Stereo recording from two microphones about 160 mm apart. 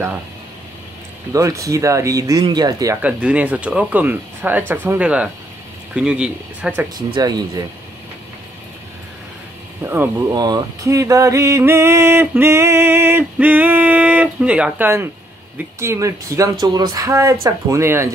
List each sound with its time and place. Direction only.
1.3 s speech: 20° right (ahead or behind)
3.0 s speech: 10° right (ahead or behind)
7.1 s speech: 25° right (ahead or behind)
9.8 s speech: 15° right (ahead or behind)
10.3 s a sound: 25° right (ahead or behind)
15.5 s speech: 15° right (ahead or behind)